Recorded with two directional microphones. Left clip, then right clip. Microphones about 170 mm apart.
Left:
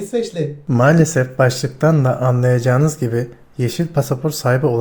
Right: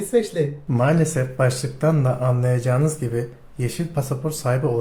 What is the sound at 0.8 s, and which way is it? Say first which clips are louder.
Speech: left 7 dB; 35° left (ahead or behind).